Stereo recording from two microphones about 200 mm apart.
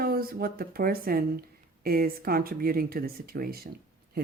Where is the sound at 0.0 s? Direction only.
50° right (ahead or behind).